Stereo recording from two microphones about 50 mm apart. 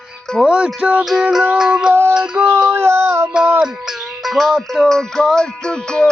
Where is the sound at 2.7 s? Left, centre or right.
Right.